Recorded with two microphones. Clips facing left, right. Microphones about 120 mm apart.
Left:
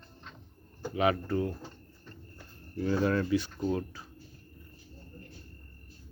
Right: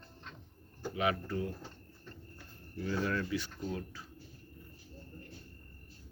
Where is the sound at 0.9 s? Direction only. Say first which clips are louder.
Left 6 dB; 40° left (ahead or behind).